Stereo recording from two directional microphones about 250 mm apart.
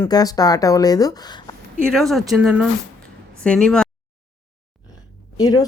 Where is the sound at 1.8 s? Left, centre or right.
Centre.